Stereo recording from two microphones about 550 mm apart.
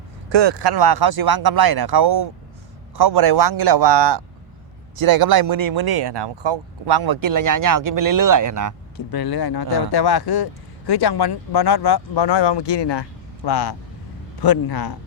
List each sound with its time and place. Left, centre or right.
0.3 s speech: right
9.0 s a man's voice: left